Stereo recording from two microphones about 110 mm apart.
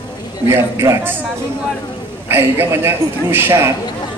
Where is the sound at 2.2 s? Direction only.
20° right (ahead or behind).